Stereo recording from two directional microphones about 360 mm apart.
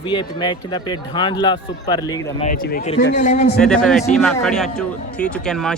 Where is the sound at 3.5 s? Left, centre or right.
Centre.